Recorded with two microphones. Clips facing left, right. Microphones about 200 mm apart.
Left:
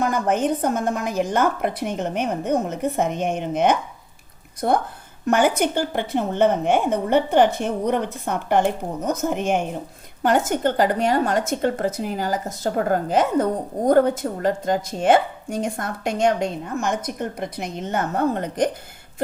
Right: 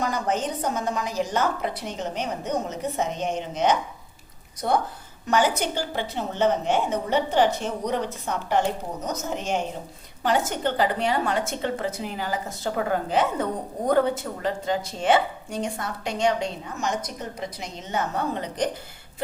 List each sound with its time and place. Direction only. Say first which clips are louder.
0.0 s a woman's voice: left 5 dB; 55° left (ahead or behind)